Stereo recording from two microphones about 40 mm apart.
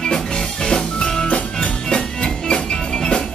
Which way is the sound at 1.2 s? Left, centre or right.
Left.